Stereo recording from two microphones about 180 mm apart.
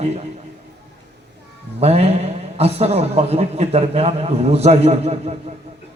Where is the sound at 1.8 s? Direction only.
35° right (ahead or behind).